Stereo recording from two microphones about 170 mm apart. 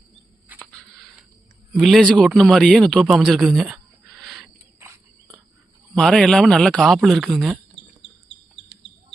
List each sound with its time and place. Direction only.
0.4 s mouse: 10° right (ahead or behind)
0.7 s a sound: 5° left (ahead or behind)
1.7 s a man's voice: centre (ahead or behind)
5.9 s a man's voice: centre (ahead or behind)
8.7 s chicken: 75° left (ahead or behind)